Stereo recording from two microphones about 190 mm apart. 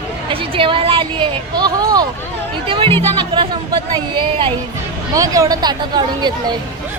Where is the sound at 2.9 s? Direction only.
10° left (ahead or behind).